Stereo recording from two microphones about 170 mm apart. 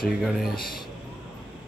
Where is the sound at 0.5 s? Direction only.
60° left (ahead or behind).